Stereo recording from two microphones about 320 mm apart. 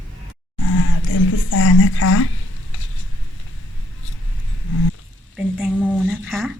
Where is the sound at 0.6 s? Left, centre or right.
Left.